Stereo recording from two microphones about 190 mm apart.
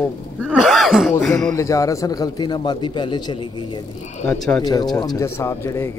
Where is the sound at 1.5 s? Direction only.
15° left (ahead or behind).